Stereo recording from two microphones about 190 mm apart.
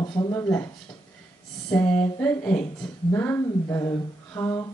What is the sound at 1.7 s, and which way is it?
Speech, 5° left (ahead or behind).